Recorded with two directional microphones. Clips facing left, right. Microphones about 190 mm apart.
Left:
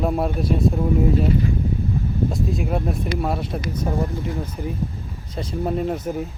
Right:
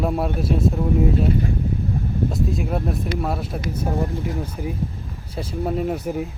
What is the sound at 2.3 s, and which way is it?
Speech, centre (ahead or behind).